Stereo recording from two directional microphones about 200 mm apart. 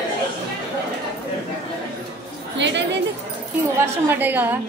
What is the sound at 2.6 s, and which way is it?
Chatter, 60° right (ahead or behind).